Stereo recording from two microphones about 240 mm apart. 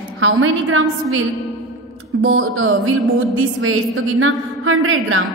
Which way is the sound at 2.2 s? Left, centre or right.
Right.